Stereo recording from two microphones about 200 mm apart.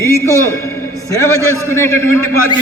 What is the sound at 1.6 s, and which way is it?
Speech, 15° left (ahead or behind).